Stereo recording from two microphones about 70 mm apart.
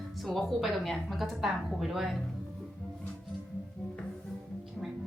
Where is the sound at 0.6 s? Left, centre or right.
Centre.